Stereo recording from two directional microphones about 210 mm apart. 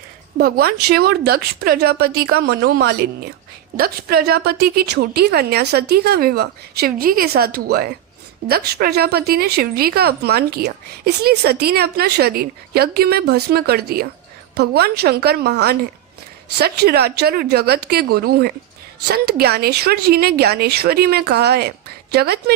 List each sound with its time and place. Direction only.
0.3 s a woman's voice: 45° right (ahead or behind)